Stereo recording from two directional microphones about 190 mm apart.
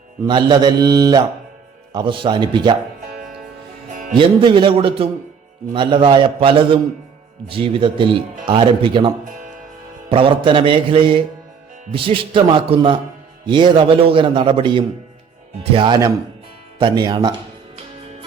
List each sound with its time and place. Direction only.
0.3 s a man's voice: 25° right (ahead or behind)
4.1 s a man's voice: 25° right (ahead or behind)